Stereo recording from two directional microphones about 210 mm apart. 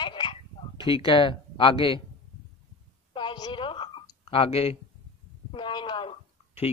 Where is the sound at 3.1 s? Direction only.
20° left (ahead or behind).